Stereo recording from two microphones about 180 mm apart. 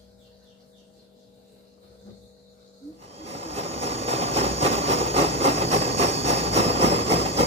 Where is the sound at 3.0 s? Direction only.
35° right (ahead or behind).